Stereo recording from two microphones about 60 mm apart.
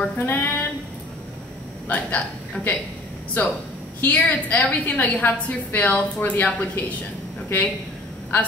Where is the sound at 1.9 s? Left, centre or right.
Left.